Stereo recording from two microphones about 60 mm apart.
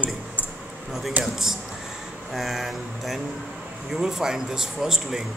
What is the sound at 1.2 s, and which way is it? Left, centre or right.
Speech, right.